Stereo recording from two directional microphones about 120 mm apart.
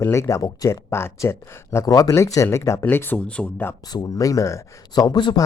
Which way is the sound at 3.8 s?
35° left (ahead or behind).